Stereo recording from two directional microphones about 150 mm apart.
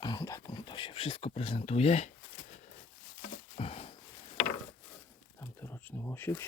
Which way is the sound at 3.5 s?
40° left (ahead or behind).